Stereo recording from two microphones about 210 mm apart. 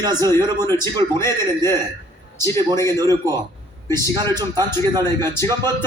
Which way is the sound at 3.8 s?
15° left (ahead or behind).